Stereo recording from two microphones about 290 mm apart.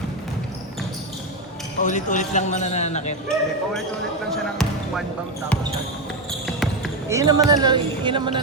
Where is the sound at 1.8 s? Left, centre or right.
Left.